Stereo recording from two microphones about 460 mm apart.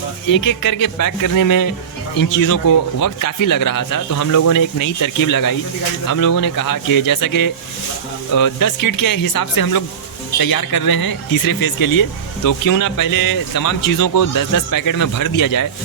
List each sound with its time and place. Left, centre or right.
0.3 s speech: left